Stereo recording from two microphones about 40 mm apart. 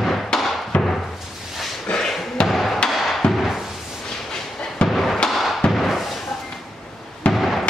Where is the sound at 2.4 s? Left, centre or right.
Centre.